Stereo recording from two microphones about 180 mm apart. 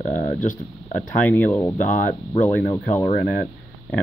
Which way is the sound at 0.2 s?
45° left (ahead or behind).